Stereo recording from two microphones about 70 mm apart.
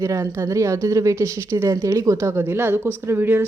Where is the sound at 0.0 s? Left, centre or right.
Right.